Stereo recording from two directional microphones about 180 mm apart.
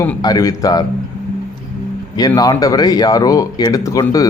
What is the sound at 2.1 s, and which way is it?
Speech, 20° left (ahead or behind).